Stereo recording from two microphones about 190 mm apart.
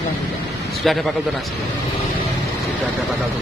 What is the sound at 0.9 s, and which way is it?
Speech, centre (ahead or behind).